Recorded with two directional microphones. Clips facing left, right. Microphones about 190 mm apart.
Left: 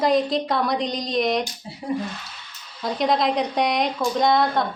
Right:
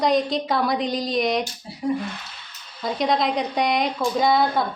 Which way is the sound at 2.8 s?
Centre (ahead or behind).